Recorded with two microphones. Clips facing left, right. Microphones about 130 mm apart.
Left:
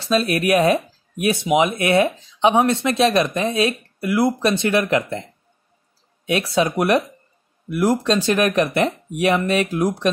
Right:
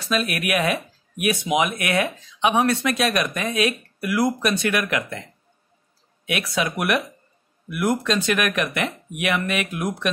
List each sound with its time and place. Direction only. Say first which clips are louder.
0.0 s speech: left 5 dB; 30° left (ahead or behind)
6.2 s speech: left 6 dB; 30° left (ahead or behind)